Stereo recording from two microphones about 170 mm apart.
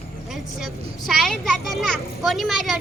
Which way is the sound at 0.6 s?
Centre (ahead or behind).